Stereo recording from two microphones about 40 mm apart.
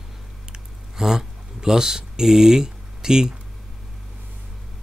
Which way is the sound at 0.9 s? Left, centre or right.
Centre.